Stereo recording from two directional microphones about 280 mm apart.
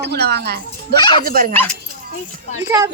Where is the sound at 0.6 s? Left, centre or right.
Centre.